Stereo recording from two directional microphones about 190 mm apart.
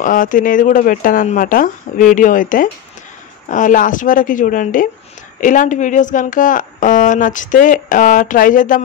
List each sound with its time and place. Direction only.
0.0 s speech: 45° left (ahead or behind)